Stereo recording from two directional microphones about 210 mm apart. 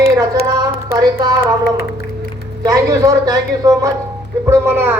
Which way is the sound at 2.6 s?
15° right (ahead or behind).